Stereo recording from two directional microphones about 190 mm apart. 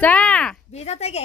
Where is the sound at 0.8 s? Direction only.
35° left (ahead or behind).